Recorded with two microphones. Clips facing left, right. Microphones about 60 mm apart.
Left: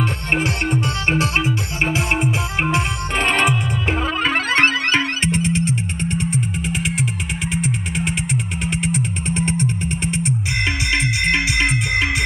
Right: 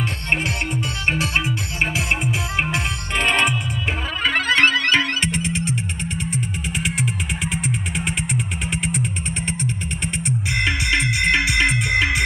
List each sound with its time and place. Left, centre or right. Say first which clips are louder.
1.4 s music: left 2 dB; left
4.2 s music: right 1 dB; left